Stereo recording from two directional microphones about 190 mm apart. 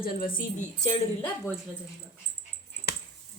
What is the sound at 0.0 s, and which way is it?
Speech, 50° left (ahead or behind).